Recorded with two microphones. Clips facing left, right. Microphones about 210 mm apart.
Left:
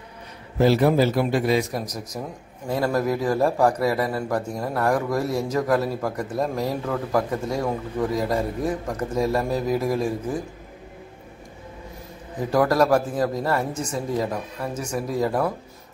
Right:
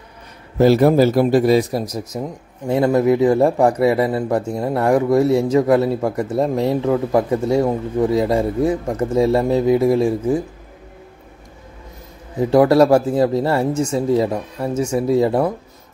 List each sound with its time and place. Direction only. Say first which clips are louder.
0.6 s a man's voice: right 6 dB; 40° right (ahead or behind); by 10.1 s 25° right (ahead or behind)
12.4 s speech: right 7 dB; 25° right (ahead or behind)